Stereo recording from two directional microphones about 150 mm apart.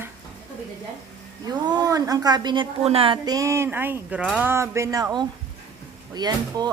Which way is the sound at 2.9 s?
40° right (ahead or behind).